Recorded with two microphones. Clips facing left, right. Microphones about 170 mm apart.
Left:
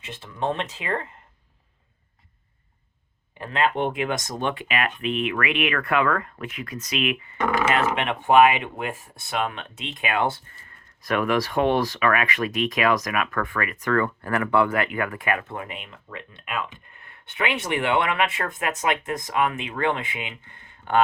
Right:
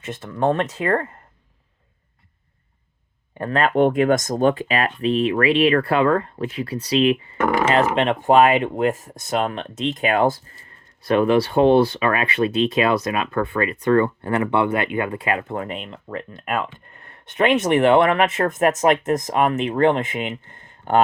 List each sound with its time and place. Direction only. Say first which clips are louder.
0.0 s speech: right 7 dB; 50° right (ahead or behind)
3.3 s speech: right 5 dB; 45° right (ahead or behind)